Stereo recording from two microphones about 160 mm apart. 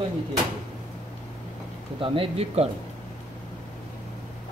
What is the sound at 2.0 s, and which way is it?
Speech, 35° right (ahead or behind).